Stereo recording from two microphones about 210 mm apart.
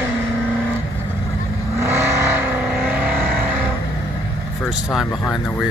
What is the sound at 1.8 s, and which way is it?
Vehicle, 10° right (ahead or behind).